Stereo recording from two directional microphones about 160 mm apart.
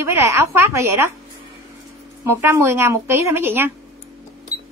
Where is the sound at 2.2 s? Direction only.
15° right (ahead or behind).